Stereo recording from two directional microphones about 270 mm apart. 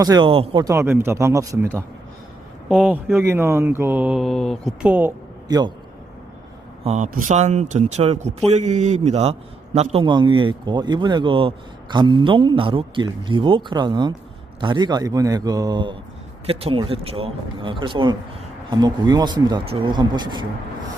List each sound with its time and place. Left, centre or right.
0.0 s a man's voice: centre
6.8 s a man's voice: right